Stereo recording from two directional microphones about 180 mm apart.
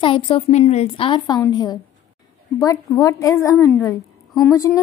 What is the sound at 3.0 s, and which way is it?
Speech, 20° left (ahead or behind).